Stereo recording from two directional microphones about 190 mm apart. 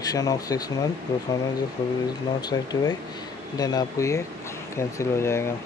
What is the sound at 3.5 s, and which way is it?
Speech, 20° left (ahead or behind).